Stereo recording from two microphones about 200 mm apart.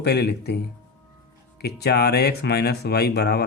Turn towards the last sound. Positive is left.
turn(degrees=55)  # may be behind; listen again after turning